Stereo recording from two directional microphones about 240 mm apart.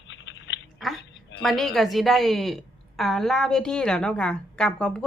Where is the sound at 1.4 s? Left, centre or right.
Centre.